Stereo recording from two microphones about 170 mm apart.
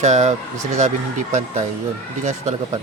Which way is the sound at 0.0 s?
45° right (ahead or behind).